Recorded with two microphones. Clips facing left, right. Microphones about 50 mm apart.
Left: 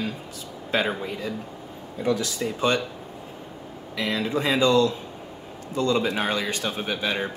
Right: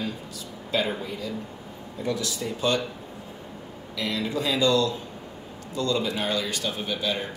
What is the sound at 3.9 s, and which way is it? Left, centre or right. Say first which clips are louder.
Speech: left 3 dB; left.